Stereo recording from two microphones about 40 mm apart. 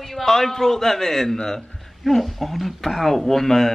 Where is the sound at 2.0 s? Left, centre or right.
Centre.